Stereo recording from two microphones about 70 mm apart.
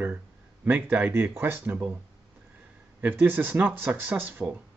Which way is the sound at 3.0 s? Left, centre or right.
Right.